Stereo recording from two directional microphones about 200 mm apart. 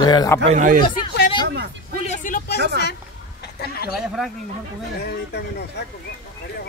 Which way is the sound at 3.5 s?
50° left (ahead or behind).